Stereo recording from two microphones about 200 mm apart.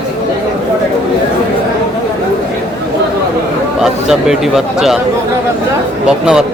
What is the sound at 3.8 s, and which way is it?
Speech, 5° right (ahead or behind).